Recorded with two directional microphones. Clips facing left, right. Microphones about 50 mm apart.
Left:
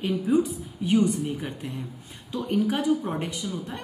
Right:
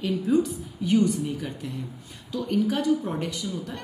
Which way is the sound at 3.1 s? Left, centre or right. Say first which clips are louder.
Even; centre.